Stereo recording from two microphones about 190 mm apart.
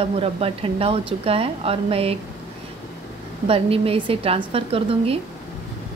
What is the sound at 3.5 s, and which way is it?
A woman's voice, 30° right (ahead or behind).